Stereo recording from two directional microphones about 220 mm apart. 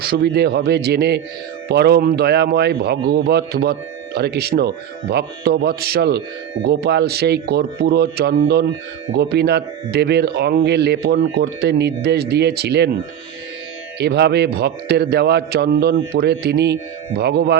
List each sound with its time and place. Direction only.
0.0 s a man's voice: 45° right (ahead or behind)
14.0 s a man's voice: 50° right (ahead or behind)